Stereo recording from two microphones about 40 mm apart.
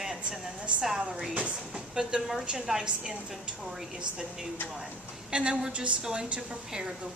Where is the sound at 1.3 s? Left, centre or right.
Right.